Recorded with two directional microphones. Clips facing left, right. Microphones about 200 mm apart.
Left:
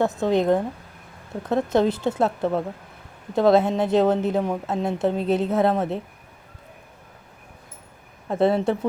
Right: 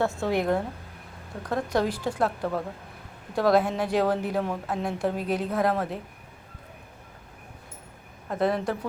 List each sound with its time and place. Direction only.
0.0 s a woman's voice: 20° left (ahead or behind)
8.3 s a woman's voice: 25° left (ahead or behind)